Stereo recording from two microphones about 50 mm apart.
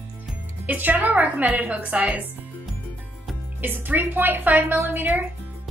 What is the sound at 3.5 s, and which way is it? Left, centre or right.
A woman's voice, right.